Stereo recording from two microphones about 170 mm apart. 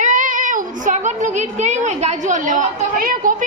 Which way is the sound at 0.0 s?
50° right (ahead or behind).